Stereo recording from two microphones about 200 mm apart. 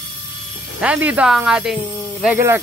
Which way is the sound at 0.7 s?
5° right (ahead or behind).